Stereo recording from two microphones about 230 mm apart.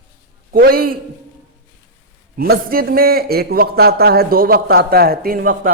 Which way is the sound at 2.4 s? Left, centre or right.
Right.